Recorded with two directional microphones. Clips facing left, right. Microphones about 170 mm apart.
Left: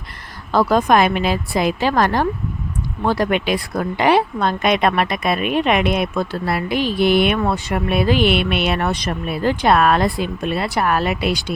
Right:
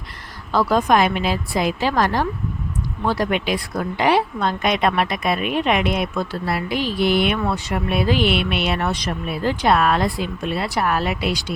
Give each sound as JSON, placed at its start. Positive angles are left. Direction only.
{"t": 0.5, "sound": "speech", "side_deg": 55}